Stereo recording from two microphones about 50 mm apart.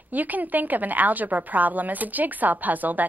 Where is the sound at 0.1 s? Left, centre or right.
Right.